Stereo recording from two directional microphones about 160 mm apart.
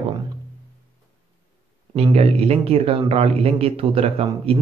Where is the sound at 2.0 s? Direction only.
40° right (ahead or behind).